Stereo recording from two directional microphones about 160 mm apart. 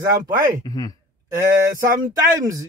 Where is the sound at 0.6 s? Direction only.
25° left (ahead or behind).